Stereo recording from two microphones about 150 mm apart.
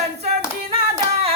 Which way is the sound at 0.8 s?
40° right (ahead or behind).